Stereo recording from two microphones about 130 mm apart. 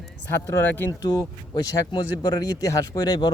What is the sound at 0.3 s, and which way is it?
Speech, 20° left (ahead or behind).